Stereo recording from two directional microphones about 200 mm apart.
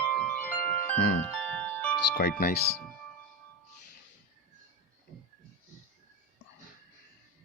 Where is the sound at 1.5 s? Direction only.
5° left (ahead or behind).